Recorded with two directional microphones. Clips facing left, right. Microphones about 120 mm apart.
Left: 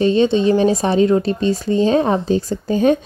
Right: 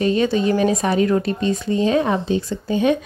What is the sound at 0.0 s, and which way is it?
Speech, 30° left (ahead or behind).